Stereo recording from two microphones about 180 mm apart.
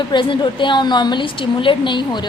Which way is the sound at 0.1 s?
25° left (ahead or behind).